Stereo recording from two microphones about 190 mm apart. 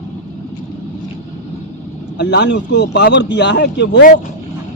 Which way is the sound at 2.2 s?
65° left (ahead or behind).